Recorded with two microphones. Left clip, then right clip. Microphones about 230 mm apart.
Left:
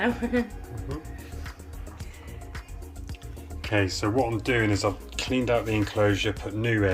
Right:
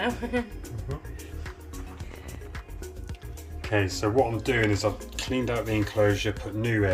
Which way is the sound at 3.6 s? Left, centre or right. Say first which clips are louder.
Even; centre.